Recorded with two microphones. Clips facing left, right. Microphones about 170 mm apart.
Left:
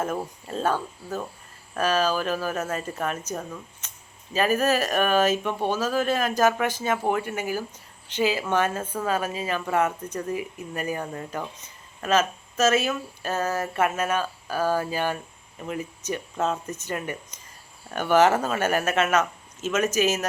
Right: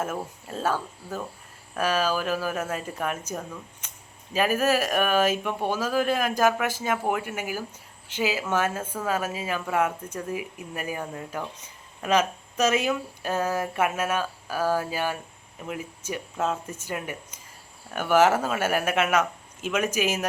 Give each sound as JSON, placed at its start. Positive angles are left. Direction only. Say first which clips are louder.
{"t": 0.0, "sound": "speech", "louder": "left 2 dB", "side_deg": -5}
{"t": 3.8, "sound": "a sound", "louder": "even", "side_deg": -10}
{"t": 4.4, "sound": "speech", "louder": "left 1 dB", "side_deg": -10}